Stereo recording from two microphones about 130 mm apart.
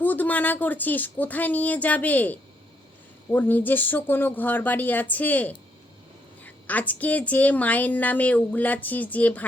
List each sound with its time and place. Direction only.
0.0 s a woman's voice: 15° left (ahead or behind)